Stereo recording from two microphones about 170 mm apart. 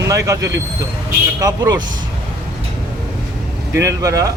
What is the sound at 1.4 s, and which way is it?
Speech, 20° right (ahead or behind).